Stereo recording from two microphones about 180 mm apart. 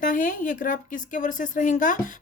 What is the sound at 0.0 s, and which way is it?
Speech, 50° left (ahead or behind).